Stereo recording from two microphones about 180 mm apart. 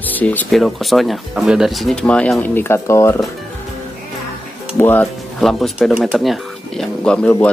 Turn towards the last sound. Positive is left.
turn(degrees=5)  # may be behind; listen again after turning